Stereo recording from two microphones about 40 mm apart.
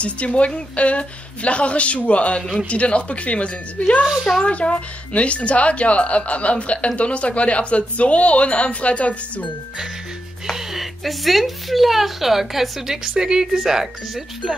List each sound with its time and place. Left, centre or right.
0.0 s speech: left
10.5 s speech: centre